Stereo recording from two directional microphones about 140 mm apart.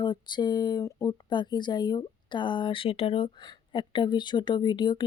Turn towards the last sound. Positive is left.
turn(degrees=35)  # may be behind; listen again after turning